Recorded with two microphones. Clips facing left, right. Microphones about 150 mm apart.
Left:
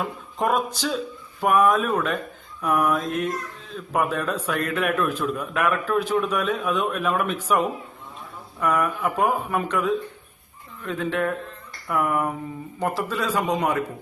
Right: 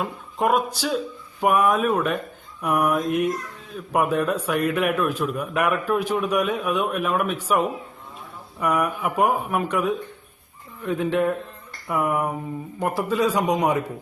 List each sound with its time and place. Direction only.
0.0 s a man's voice: 5° right (ahead or behind)
8.6 s a man's voice: 10° right (ahead or behind)